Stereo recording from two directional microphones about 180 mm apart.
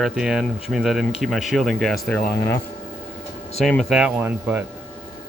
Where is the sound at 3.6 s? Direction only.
Centre (ahead or behind).